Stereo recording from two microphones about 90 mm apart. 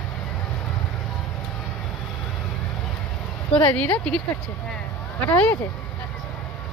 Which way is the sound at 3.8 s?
10° left (ahead or behind).